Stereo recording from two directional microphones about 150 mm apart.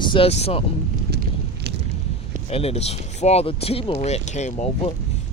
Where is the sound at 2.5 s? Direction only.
40° left (ahead or behind).